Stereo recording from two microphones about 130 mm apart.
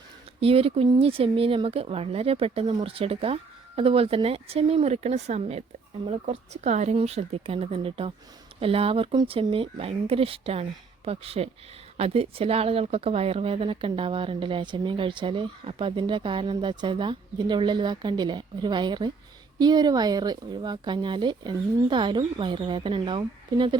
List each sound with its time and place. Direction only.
0.3 s speech: 45° right (ahead or behind)